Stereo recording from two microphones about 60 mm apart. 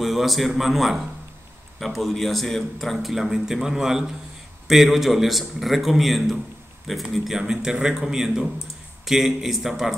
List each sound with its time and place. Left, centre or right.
0.0 s speech: centre